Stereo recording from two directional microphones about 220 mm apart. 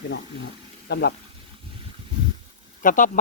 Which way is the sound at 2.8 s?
35° left (ahead or behind).